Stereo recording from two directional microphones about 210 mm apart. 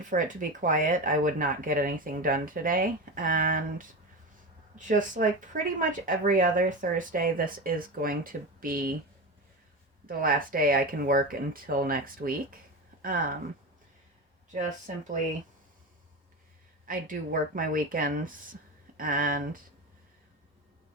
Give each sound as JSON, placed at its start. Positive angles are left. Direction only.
{"t": 0.0, "sound": "speech", "side_deg": -40}
{"t": 10.1, "sound": "speech", "side_deg": -40}
{"t": 14.9, "sound": "speech", "side_deg": -35}
{"t": 16.8, "sound": "speech", "side_deg": -40}